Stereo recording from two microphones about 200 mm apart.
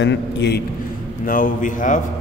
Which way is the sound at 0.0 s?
60° left (ahead or behind).